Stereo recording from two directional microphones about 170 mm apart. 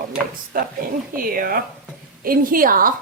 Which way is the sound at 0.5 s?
60° right (ahead or behind).